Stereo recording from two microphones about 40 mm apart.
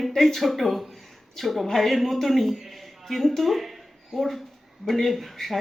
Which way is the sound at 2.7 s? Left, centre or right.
Centre.